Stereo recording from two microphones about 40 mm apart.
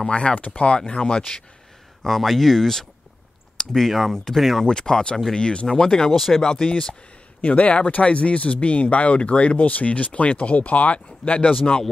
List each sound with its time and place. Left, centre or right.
0.0 s speech: left
2.0 s speech: centre
4.6 s speech: centre
6.1 s speech: centre
6.4 s speech: left
7.4 s speech: left